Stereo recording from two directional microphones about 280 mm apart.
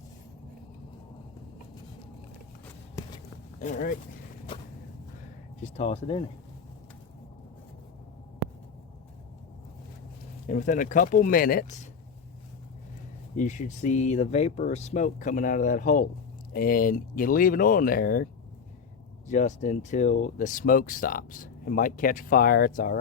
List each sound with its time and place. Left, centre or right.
3.6 s speech: left
5.7 s speech: left
10.4 s speech: left
13.3 s speech: left
19.3 s speech: left